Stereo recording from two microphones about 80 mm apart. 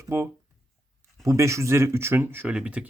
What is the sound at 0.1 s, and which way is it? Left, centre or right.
Speech, right.